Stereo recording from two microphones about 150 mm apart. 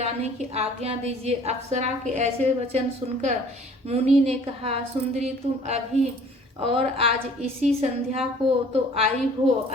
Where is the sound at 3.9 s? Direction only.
45° right (ahead or behind).